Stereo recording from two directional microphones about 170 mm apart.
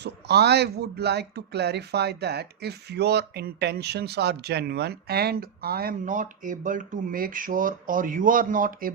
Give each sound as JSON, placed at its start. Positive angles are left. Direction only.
{"t": 0.0, "sound": "speech", "side_deg": -75}